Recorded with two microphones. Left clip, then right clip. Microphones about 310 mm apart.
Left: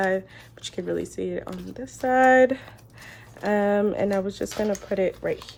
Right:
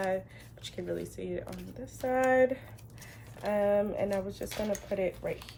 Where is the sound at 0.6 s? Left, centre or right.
Left.